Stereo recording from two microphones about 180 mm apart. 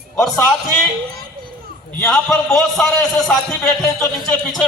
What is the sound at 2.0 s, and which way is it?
A man's voice, 5° left (ahead or behind).